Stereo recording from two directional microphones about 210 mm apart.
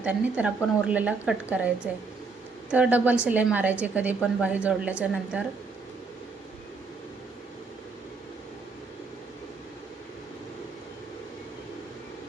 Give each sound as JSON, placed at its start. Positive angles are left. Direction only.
{"t": 0.0, "sound": "a woman's voice", "side_deg": -5}